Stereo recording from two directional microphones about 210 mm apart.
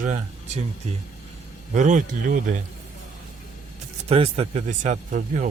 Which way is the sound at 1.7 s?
35° right (ahead or behind).